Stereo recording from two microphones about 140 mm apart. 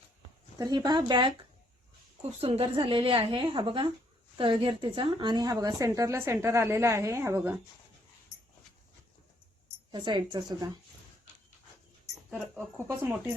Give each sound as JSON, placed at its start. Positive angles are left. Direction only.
{"t": 0.6, "sound": "a woman's voice", "side_deg": -30}
{"t": 2.4, "sound": "a woman's voice", "side_deg": -40}
{"t": 9.9, "sound": "a woman's voice", "side_deg": -35}
{"t": 12.3, "sound": "speech", "side_deg": -10}